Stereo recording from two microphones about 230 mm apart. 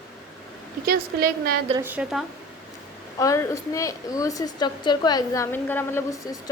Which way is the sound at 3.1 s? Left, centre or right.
Centre.